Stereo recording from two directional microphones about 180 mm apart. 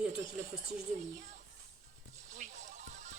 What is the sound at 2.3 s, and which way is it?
Music, 40° right (ahead or behind).